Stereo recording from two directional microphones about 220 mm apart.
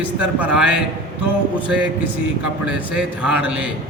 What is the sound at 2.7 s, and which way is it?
A man's voice, 5° right (ahead or behind).